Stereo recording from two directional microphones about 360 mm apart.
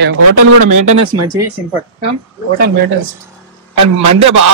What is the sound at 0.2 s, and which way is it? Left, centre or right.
Speech, right.